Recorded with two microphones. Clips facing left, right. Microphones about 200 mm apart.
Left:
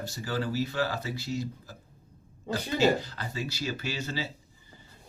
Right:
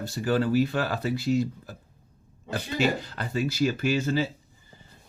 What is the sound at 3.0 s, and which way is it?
Speech, 55° right (ahead or behind).